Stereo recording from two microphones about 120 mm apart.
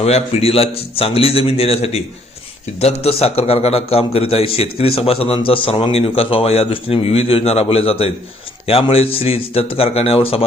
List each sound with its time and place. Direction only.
0.0 s a man's voice: 60° left (ahead or behind)